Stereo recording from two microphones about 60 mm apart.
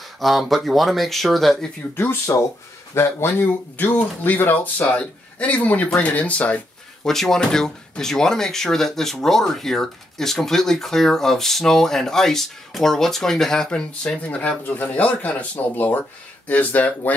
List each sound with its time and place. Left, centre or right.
0.2 s speech: centre
2.3 s speech: left
2.9 s speech: left
3.7 s speech: left
4.9 s speech: left
7.1 s speech: centre
14.2 s speech: left